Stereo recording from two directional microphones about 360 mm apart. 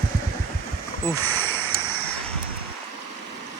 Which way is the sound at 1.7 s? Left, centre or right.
Left.